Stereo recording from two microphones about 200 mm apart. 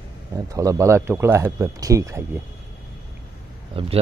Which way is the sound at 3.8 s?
25° right (ahead or behind).